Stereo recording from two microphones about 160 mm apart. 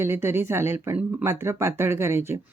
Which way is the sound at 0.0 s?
15° right (ahead or behind).